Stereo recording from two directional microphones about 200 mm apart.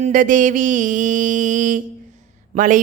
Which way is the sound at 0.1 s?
40° right (ahead or behind).